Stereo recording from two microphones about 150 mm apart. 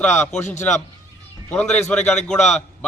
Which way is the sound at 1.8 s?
10° left (ahead or behind).